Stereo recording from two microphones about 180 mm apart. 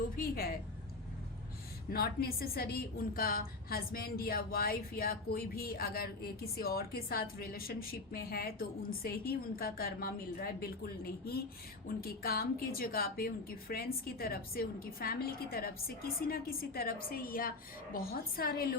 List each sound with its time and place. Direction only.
0.2 s a woman's voice: 60° left (ahead or behind)
1.9 s a woman's voice: 60° left (ahead or behind)